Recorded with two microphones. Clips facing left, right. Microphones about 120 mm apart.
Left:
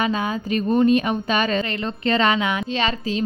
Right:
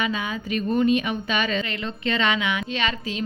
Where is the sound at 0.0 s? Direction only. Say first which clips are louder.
Left 4 dB; 40° left (ahead or behind).